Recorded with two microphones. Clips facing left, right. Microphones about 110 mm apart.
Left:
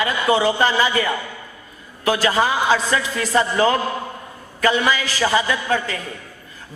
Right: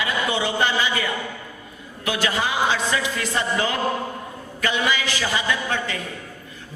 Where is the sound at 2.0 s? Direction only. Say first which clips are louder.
Left 6 dB; 35° left (ahead or behind).